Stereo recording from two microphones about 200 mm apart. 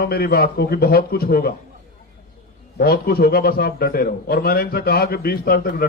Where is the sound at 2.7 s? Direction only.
50° left (ahead or behind).